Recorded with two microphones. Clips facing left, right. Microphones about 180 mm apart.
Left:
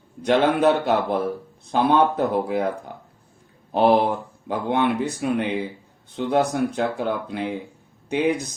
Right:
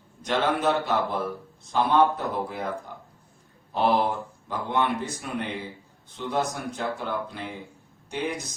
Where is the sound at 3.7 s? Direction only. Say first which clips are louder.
Left 6 dB; 60° left (ahead or behind).